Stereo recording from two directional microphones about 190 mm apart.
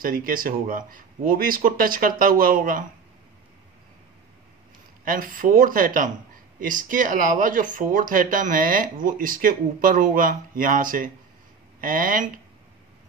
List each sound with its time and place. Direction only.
0.0 s speech: 50° right (ahead or behind)
5.0 s speech: 50° right (ahead or behind)